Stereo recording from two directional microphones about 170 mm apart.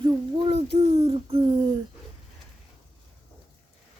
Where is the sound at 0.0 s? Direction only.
30° right (ahead or behind).